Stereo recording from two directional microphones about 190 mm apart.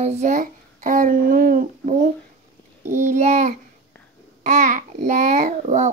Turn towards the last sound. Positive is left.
turn(degrees=-40)  # may be behind; listen again after turning